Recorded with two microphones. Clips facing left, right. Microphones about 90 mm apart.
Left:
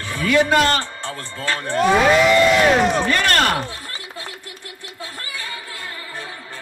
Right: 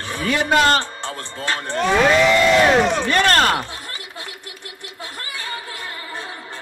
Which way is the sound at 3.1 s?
30° right (ahead or behind).